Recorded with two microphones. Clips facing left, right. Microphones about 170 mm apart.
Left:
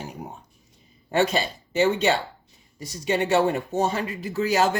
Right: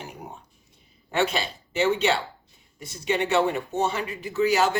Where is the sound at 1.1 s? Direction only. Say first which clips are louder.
Left 3 dB; 40° left (ahead or behind).